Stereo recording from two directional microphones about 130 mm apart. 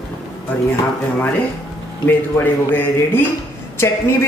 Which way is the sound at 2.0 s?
15° left (ahead or behind).